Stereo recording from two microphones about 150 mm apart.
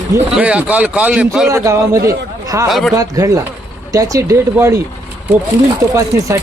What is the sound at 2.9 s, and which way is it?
Speech, 25° right (ahead or behind).